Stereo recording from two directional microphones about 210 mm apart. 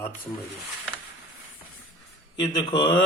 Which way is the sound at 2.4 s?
20° left (ahead or behind).